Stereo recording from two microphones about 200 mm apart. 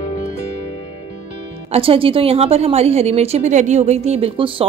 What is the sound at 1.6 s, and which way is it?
A woman's voice, 30° right (ahead or behind).